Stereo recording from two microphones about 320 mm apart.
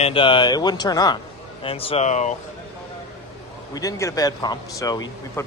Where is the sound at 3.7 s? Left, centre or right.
Centre.